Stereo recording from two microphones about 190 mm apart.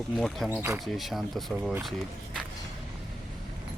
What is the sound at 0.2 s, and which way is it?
Speech, centre (ahead or behind).